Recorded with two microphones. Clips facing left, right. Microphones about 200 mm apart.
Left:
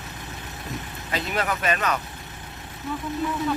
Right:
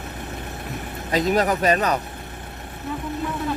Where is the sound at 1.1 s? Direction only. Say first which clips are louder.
Right 7 dB; 40° right (ahead or behind).